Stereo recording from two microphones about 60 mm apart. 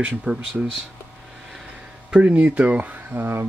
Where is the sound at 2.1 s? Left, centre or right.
Right.